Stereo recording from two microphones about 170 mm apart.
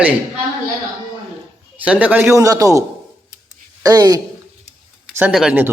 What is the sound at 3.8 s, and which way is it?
Speech, 25° right (ahead or behind).